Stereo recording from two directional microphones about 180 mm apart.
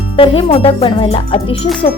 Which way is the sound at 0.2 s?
30° left (ahead or behind).